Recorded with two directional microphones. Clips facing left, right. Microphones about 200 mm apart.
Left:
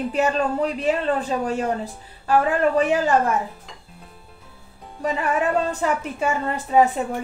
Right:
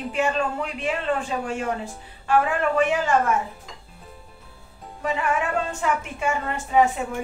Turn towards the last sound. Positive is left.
turn(degrees=35)  # may be behind; listen again after turning